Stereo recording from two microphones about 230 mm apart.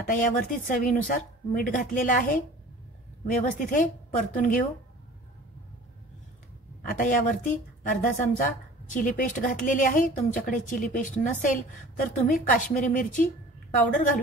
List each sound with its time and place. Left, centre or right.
0.0 s a woman's voice: left
6.8 s a woman's voice: left